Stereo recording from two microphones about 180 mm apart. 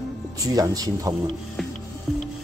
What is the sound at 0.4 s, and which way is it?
Speech, 20° right (ahead or behind).